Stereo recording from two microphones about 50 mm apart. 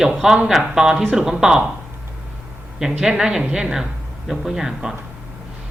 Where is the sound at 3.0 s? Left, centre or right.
Centre.